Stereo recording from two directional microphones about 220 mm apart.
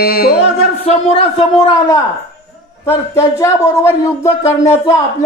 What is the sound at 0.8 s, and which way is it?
A man's voice, 25° left (ahead or behind).